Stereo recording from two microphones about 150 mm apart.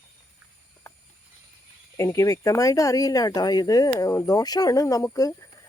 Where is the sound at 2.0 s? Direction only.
20° left (ahead or behind).